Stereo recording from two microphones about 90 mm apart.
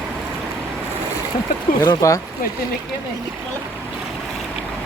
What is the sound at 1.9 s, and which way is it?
Speech, 40° left (ahead or behind).